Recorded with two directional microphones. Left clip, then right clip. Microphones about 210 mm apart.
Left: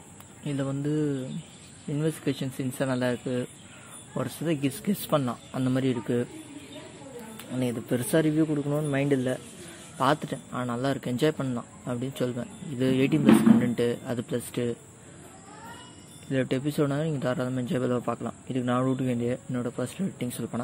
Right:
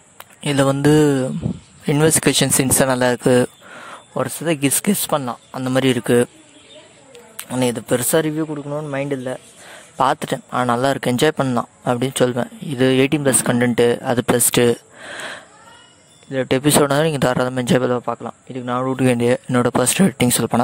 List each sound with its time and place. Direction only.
0.4 s speech: 55° right (ahead or behind)
7.3 s a man's voice: 45° right (ahead or behind)
9.9 s speech: 45° right (ahead or behind)
16.3 s speech: 40° right (ahead or behind)
19.0 s speech: 50° right (ahead or behind)